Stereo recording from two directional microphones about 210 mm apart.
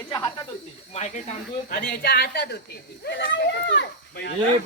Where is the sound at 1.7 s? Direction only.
45° left (ahead or behind).